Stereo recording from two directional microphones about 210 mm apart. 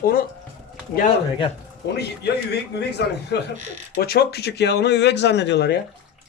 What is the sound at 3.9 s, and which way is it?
Speech, 50° left (ahead or behind).